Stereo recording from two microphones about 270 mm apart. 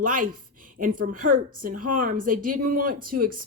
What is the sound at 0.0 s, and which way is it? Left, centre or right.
Speech, right.